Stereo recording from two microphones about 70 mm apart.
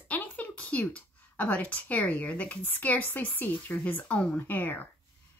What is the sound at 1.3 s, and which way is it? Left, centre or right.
Speech, left.